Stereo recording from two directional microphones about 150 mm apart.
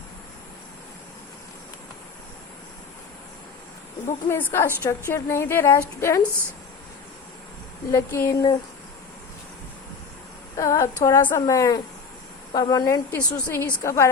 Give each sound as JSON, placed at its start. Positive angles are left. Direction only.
{"t": 4.3, "sound": "a woman's voice", "side_deg": 15}
{"t": 7.9, "sound": "speech", "side_deg": 20}
{"t": 10.6, "sound": "speech", "side_deg": 20}